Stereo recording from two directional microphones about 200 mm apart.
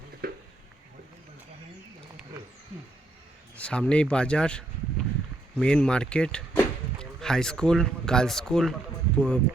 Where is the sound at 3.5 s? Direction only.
5° left (ahead or behind).